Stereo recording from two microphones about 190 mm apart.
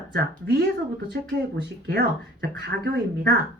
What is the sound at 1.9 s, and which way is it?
Speech, 55° right (ahead or behind).